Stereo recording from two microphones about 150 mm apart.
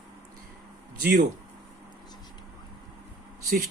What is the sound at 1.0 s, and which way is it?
Speech, 90° right.